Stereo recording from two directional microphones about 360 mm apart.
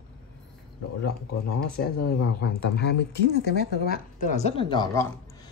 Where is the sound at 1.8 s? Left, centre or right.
Left.